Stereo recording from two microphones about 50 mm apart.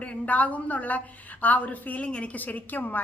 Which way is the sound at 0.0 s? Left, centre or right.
Left.